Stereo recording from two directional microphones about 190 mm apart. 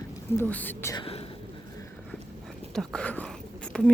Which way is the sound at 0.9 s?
30° left (ahead or behind).